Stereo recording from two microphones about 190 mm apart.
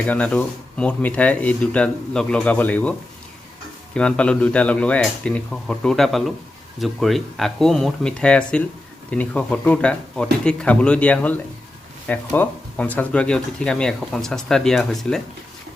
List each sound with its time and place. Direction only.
0.0 s speech: 5° left (ahead or behind)
3.9 s speech: 5° left (ahead or behind)